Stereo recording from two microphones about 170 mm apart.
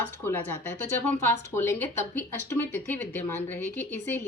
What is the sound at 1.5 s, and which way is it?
Speech, 15° left (ahead or behind).